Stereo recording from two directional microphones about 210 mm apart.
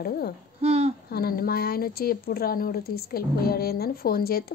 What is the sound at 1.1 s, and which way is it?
Speech, 45° left (ahead or behind).